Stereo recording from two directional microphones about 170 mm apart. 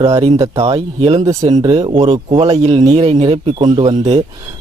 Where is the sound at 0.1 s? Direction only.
35° right (ahead or behind).